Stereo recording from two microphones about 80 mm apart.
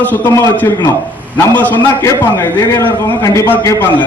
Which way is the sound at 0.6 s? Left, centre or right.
Left.